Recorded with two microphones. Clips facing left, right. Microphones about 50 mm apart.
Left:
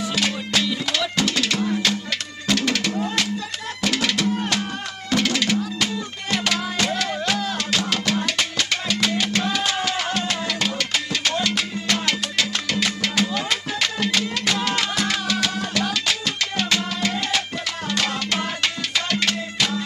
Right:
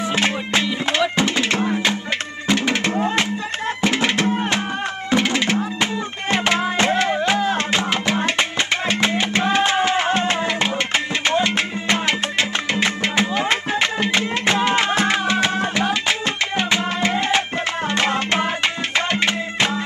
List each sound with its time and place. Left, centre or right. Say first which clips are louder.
0.0 s music: right 4 dB; right